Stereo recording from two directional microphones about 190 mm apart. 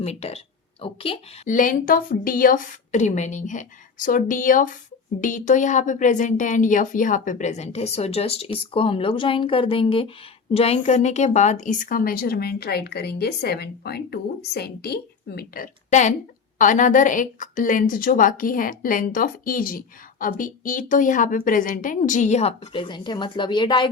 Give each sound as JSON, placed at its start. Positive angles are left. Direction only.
{"t": 0.0, "sound": "speech", "side_deg": 35}
{"t": 1.5, "sound": "a woman's voice", "side_deg": 45}